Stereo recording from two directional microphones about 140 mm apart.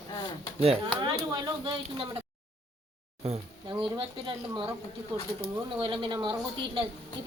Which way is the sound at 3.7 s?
40° right (ahead or behind).